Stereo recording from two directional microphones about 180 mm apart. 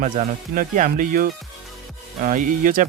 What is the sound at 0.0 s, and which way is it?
Speech, 45° right (ahead or behind).